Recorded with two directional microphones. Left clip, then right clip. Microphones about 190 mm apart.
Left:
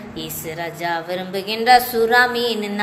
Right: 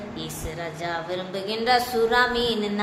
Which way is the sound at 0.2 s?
25° left (ahead or behind).